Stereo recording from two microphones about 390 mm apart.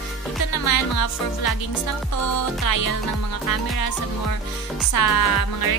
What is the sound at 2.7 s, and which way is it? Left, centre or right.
Music, left.